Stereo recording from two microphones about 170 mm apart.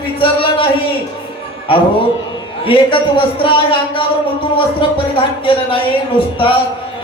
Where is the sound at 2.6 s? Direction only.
30° left (ahead or behind).